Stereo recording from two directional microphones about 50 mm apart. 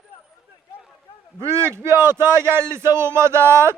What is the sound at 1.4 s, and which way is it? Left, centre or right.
Speech, right.